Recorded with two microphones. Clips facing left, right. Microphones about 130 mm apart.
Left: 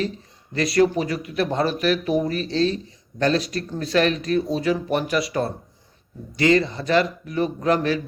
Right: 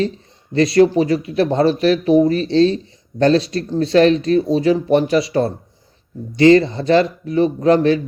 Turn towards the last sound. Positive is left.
turn(degrees=-30)  # may be behind; listen again after turning